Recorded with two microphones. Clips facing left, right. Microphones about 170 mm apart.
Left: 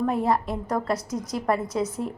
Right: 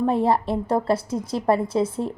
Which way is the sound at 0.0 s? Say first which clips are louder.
Right 3 dB; 30° right (ahead or behind).